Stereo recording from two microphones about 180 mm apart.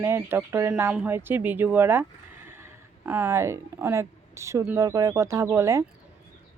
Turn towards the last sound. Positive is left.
turn(degrees=-15)  # may be behind; listen again after turning